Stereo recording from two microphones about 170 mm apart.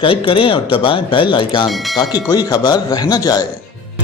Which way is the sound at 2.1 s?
25° left (ahead or behind).